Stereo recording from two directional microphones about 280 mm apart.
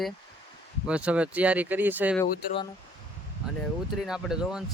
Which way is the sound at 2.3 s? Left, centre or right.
Left.